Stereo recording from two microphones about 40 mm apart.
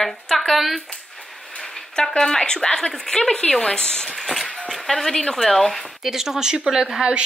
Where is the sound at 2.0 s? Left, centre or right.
Centre.